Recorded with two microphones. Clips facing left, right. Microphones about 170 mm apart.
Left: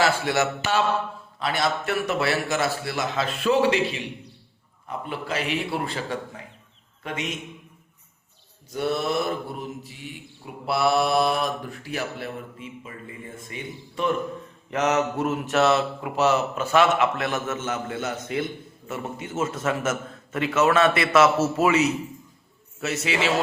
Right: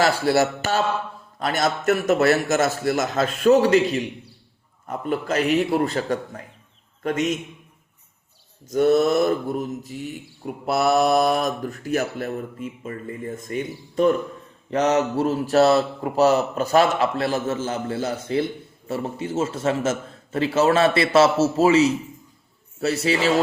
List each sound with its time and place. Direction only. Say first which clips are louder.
0.0 s speech: right 3 dB; 40° right (ahead or behind)
1.4 s mantra: right 2 dB; 45° right (ahead or behind)
8.7 s mantra: right 8 dB; 45° right (ahead or behind)
14.7 s a man's voice: right 3 dB; 35° right (ahead or behind)